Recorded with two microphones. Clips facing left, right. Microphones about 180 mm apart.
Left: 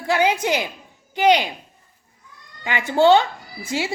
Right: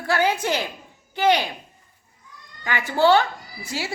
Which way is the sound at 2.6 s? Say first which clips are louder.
Left 3 dB; 20° left (ahead or behind).